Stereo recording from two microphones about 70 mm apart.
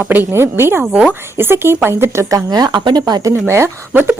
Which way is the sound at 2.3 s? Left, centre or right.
Right.